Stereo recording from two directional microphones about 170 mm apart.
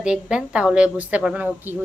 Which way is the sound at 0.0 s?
5° right (ahead or behind).